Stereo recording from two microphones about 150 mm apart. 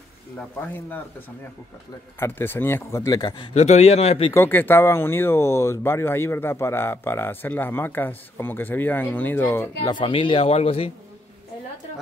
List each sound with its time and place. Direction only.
0.4 s speech: 10° left (ahead or behind)
2.1 s speech: 15° left (ahead or behind)
3.5 s a man's voice: 45° left (ahead or behind)
4.3 s speech: 15° left (ahead or behind)
9.8 s speech: 35° left (ahead or behind)